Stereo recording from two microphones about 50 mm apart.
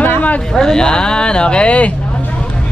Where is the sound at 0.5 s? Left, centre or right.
Centre.